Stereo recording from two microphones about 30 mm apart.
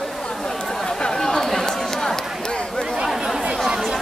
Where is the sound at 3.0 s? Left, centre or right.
Centre.